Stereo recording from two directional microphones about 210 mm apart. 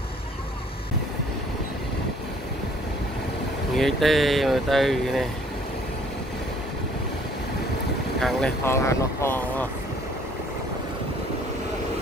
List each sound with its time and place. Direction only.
3.7 s speech: centre (ahead or behind)
8.2 s speech: centre (ahead or behind)
8.6 s speech: 10° left (ahead or behind)